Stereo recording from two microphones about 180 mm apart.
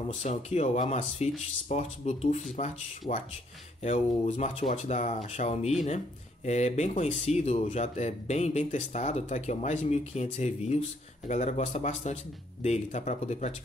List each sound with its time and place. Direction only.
0.2 s speech: 40° left (ahead or behind)